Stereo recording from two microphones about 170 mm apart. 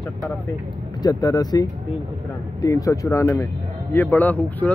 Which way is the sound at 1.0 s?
20° left (ahead or behind).